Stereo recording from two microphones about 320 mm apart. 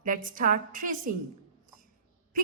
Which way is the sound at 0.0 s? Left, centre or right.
Right.